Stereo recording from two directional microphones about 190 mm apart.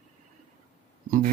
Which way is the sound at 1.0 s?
45° right (ahead or behind).